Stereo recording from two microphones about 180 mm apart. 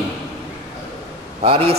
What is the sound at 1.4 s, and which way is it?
Speech, 35° right (ahead or behind).